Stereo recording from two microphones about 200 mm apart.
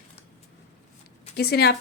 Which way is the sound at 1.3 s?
50° left (ahead or behind).